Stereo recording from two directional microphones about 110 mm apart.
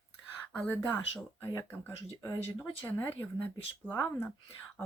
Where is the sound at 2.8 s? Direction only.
15° left (ahead or behind).